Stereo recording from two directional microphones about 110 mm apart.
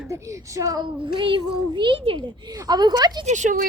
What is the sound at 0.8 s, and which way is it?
A child's voice, 50° right (ahead or behind).